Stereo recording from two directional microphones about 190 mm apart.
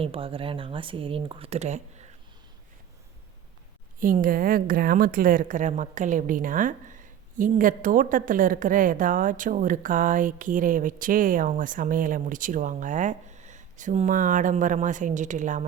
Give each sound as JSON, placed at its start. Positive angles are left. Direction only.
{"t": 0.0, "sound": "speech", "side_deg": -30}
{"t": 4.0, "sound": "a woman's voice", "side_deg": -45}